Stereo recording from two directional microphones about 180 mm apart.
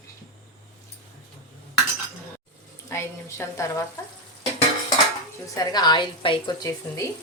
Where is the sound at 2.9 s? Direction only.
15° left (ahead or behind).